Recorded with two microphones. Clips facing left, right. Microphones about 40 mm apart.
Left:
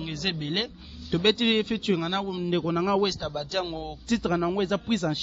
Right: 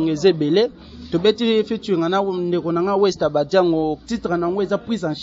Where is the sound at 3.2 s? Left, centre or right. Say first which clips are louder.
Right 14 dB; centre.